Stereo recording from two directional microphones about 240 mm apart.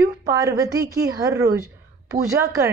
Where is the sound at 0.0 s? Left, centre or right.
Centre.